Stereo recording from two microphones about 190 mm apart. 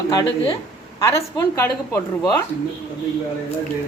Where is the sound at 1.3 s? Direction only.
15° left (ahead or behind).